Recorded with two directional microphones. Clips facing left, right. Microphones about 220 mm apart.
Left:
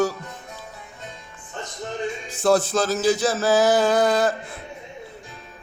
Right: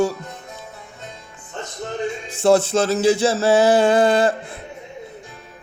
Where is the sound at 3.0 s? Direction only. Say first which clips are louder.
Right 4 dB; 25° right (ahead or behind).